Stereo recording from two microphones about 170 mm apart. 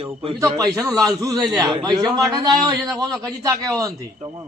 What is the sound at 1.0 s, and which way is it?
A man's voice, 20° right (ahead or behind).